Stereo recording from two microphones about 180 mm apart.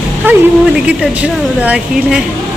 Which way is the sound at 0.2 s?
10° right (ahead or behind).